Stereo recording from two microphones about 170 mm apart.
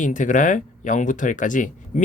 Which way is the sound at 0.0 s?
50° left (ahead or behind).